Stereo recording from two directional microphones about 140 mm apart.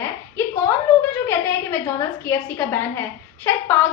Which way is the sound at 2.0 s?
15° left (ahead or behind).